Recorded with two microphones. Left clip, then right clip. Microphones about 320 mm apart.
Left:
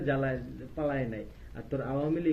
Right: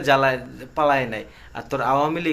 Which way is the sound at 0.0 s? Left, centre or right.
Right.